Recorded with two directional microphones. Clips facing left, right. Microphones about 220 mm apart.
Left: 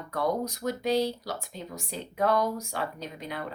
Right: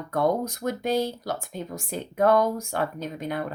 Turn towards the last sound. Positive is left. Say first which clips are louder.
# right 7 dB
turn(degrees=-50)  # may be behind; listen again after turning